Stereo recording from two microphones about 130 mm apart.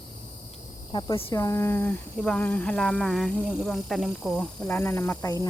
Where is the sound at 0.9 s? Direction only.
35° left (ahead or behind).